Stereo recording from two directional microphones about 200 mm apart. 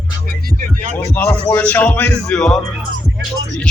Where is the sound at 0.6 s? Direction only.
40° right (ahead or behind).